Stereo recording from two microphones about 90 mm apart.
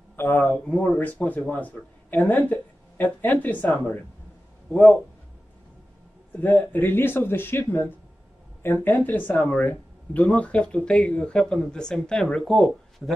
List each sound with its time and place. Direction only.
0.1 s speech: 25° left (ahead or behind)
6.4 s speech: 20° left (ahead or behind); by 13.1 s 5° left (ahead or behind)